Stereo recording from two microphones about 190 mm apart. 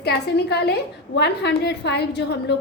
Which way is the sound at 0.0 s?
60° left (ahead or behind).